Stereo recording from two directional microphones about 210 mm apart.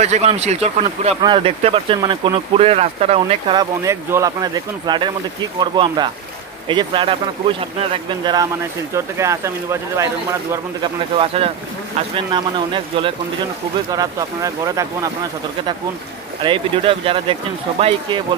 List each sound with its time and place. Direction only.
0.0 s speech: 30° right (ahead or behind); by 10.0 s 15° right (ahead or behind)
10.8 s speech: 25° right (ahead or behind)
16.4 s speech: 25° right (ahead or behind)